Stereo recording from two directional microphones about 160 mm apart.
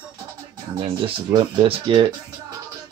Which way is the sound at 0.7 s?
30° right (ahead or behind).